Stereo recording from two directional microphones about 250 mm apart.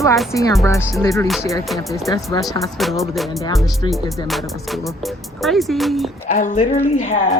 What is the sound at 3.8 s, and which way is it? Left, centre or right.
Speech, centre.